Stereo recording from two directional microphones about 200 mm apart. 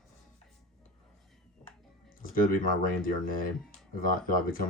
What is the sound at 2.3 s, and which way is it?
Speech, 45° left (ahead or behind).